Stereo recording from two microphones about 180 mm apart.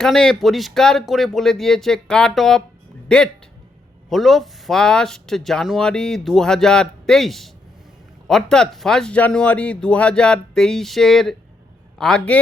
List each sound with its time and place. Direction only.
0.0 s speech: 5° left (ahead or behind)